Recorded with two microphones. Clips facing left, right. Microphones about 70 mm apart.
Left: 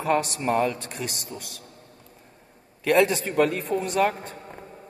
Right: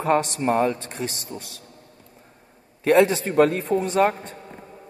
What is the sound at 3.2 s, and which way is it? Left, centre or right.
Speech, right.